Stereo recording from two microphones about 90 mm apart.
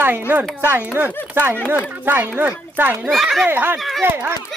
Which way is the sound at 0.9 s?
20° right (ahead or behind).